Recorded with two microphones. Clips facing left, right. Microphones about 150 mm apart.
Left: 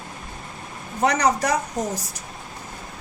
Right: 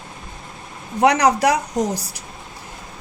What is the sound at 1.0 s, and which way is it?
Speech, 70° right (ahead or behind).